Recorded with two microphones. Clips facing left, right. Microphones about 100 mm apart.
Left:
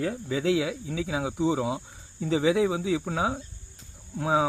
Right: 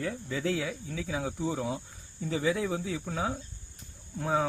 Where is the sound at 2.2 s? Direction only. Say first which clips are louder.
Left 6 dB; 90° left.